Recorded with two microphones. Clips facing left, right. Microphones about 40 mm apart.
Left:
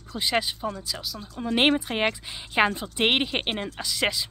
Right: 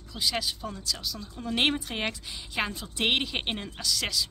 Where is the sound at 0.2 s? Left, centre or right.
Left.